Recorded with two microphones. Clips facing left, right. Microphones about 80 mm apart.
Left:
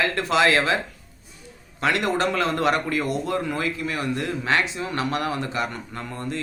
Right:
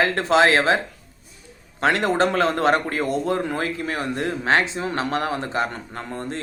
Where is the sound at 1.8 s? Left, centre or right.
Right.